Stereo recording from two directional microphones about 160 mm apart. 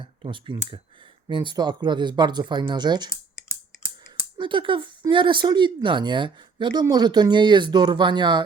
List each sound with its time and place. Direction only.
0.0 s speech: 30° right (ahead or behind)
3.1 s clicking: 20° left (ahead or behind)
4.4 s speech: 30° right (ahead or behind)